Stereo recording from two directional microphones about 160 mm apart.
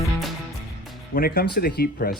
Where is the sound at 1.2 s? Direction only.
70° left (ahead or behind).